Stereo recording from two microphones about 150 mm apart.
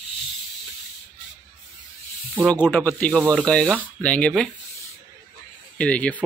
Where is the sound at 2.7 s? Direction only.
10° left (ahead or behind).